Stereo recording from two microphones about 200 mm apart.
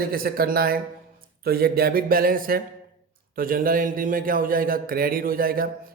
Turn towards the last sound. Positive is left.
turn(degrees=-45)  # may be behind; listen again after turning